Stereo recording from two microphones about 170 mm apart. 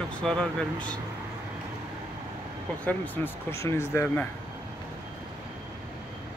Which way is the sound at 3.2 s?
10° left (ahead or behind).